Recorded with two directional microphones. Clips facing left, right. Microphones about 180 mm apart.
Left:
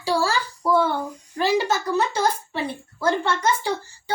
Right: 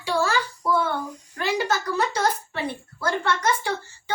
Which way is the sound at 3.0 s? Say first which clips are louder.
Left 3 dB; 25° left (ahead or behind).